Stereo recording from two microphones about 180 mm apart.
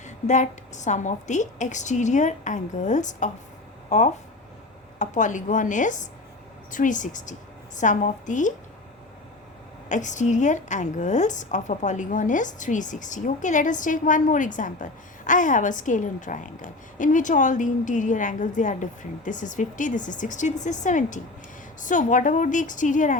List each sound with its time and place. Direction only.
0.0 s a woman's voice: 40° left (ahead or behind)
9.9 s a woman's voice: 45° left (ahead or behind)